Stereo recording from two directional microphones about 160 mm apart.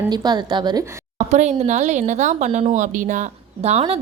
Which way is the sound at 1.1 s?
45° right (ahead or behind).